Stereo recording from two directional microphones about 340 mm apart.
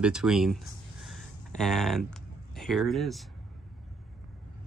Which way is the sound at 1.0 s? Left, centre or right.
Centre.